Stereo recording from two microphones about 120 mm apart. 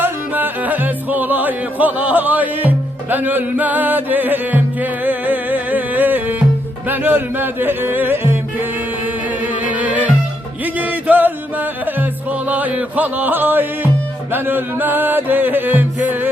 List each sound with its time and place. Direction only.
0.0 s music: 15° right (ahead or behind)